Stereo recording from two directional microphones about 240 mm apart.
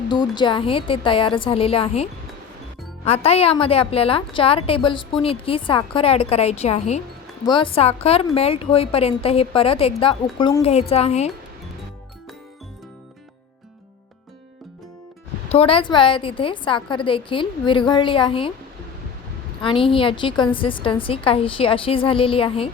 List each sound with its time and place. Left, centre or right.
0.1 s a woman's voice: centre
15.4 s a woman's voice: left
19.6 s a woman's voice: left